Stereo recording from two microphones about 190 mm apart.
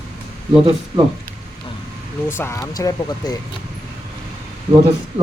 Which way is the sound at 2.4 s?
15° left (ahead or behind).